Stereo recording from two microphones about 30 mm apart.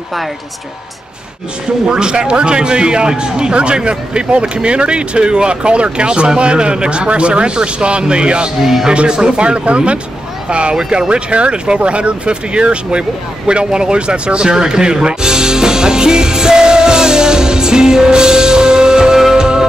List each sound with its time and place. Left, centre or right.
1.9 s a man's voice: right
10.8 s a man's voice: right
11.1 s speech: right
14.5 s speech: right